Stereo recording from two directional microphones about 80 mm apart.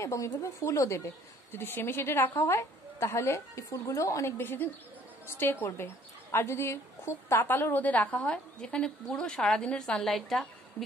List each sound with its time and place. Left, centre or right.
0.0 s a woman's voice: left
4.4 s a woman's voice: left; by 10.5 s centre